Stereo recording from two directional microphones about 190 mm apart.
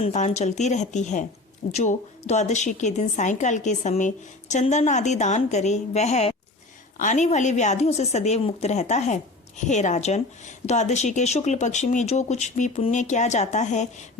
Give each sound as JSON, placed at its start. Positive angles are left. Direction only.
{"t": 0.0, "sound": "a woman's voice", "side_deg": 35}